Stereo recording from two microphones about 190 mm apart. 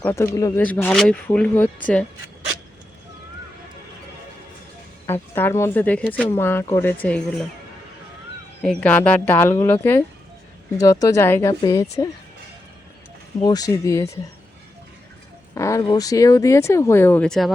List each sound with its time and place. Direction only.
0.0 s speech: 15° left (ahead or behind)
5.0 s speech: 10° left (ahead or behind)
8.6 s speech: 5° left (ahead or behind)
10.8 s speech: 15° left (ahead or behind)
13.4 s speech: 20° left (ahead or behind)
15.5 s speech: 15° left (ahead or behind)